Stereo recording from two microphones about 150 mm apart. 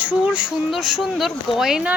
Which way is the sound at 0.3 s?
5° right (ahead or behind).